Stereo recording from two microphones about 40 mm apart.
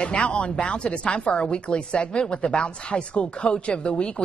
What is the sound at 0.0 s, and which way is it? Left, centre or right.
A woman's voice, left.